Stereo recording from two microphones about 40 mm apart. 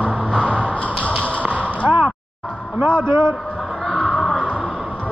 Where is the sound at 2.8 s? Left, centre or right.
Right.